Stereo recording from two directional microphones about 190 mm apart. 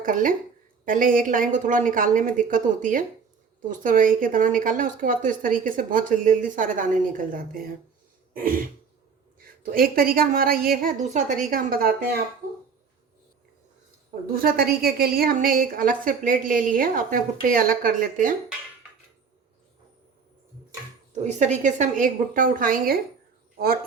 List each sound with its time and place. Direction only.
0.0 s a woman's voice: 45° right (ahead or behind)
8.3 s throat clearing: 45° right (ahead or behind)
9.4 s a woman's voice: 50° right (ahead or behind)
14.3 s a woman's voice: 50° right (ahead or behind)
21.2 s a woman's voice: 40° right (ahead or behind)